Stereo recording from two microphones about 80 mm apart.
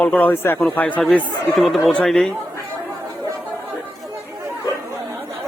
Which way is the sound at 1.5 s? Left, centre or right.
Centre.